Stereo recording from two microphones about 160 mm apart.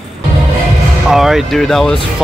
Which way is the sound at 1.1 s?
Centre (ahead or behind).